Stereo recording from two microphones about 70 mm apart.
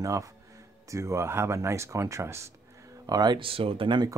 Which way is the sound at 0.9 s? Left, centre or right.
Right.